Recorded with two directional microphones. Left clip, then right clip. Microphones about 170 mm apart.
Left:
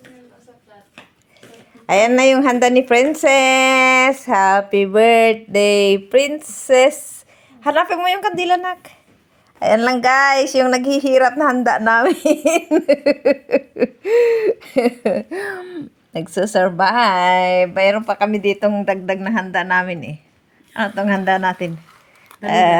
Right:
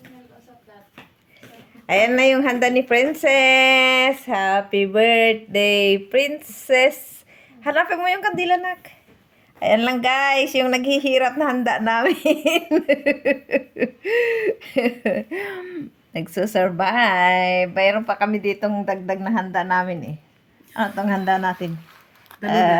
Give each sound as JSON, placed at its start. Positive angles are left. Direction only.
{"t": 1.9, "sound": "a woman's voice", "side_deg": 35}